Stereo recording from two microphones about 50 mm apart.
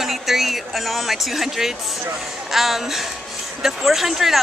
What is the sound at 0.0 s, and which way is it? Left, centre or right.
Speech, centre.